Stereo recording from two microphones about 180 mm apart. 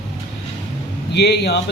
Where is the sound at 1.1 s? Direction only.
70° left (ahead or behind).